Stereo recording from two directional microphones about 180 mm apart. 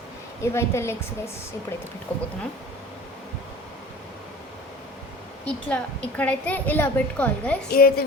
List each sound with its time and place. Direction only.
0.4 s a woman's voice: 15° left (ahead or behind)
2.1 s a woman's voice: 10° left (ahead or behind)
5.5 s a woman's voice: 5° left (ahead or behind)
7.7 s a woman's voice: 55° left (ahead or behind)